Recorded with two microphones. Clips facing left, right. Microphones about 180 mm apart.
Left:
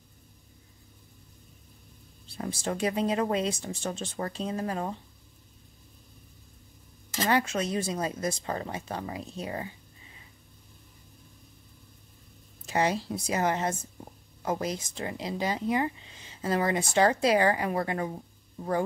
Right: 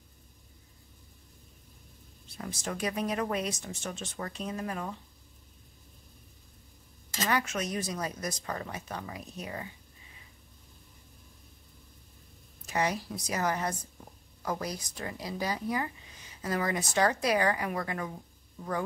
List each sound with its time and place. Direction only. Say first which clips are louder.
2.2 s speech: left 5 dB; 30° left (ahead or behind)
7.2 s speech: left 4 dB; 30° left (ahead or behind)
12.6 s speech: left 4 dB; 30° left (ahead or behind)